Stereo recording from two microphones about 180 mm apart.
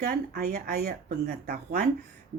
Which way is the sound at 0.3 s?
60° right (ahead or behind).